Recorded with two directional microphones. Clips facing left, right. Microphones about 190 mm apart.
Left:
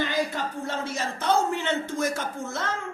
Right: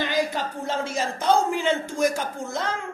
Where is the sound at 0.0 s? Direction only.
80° right.